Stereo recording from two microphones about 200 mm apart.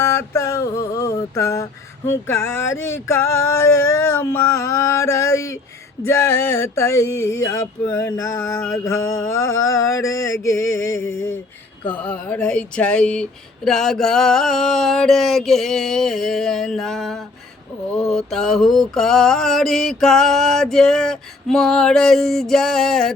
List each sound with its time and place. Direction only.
0.0 s mantra: 15° left (ahead or behind)
2.2 s a sound: 10° left (ahead or behind)
10.7 s music: 80° left
11.9 s mantra: 5° left (ahead or behind)